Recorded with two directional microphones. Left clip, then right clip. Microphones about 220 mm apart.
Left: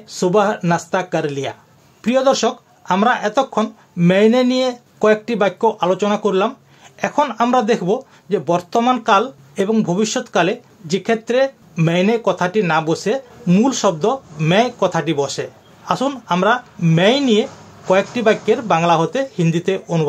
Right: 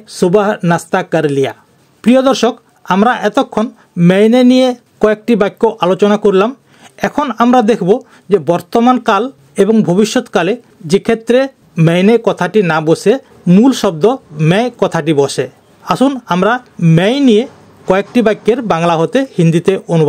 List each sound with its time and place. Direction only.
0.1 s speech: 45° right (ahead or behind)